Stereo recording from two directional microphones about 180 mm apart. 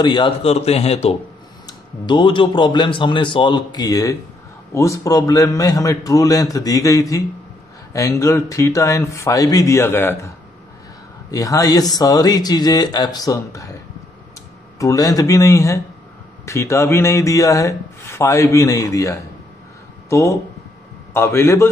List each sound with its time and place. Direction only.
0.0 s a man's voice: 25° left (ahead or behind)
14.8 s speech: 20° left (ahead or behind)